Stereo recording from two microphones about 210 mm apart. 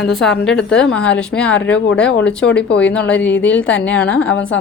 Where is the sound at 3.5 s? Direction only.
5° left (ahead or behind).